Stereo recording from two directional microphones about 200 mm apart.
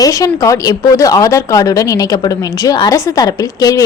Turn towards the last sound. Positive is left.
turn(degrees=15)  # may be behind; listen again after turning